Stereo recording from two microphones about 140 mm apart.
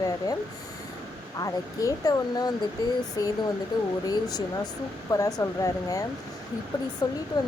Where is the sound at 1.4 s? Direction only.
25° left (ahead or behind).